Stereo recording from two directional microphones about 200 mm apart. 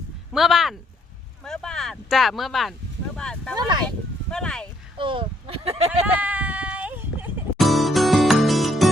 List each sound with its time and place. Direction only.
0.3 s speech: centre (ahead or behind)
3.5 s speech: 20° right (ahead or behind)
3.8 s a sound: 5° left (ahead or behind)
4.9 s speech: 25° right (ahead or behind)
6.1 s a sound: 10° right (ahead or behind)
7.6 s music: centre (ahead or behind)